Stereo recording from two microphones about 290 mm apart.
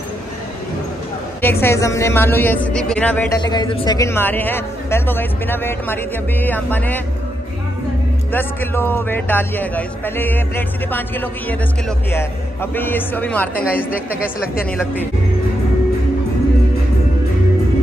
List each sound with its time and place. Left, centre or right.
1.4 s a woman's voice: centre
8.3 s a woman's voice: centre
12.7 s speech: centre